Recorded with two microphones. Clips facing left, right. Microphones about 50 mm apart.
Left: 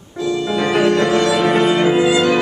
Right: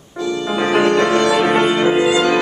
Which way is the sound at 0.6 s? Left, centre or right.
Centre.